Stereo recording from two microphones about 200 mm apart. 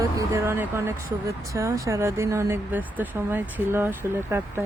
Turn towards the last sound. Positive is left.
turn(degrees=-10)  # may be behind; listen again after turning